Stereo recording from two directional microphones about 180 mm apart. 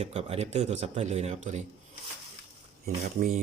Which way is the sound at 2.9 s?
50° right (ahead or behind).